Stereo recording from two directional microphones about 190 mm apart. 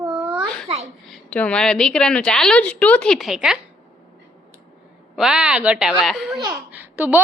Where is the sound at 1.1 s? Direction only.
5° left (ahead or behind).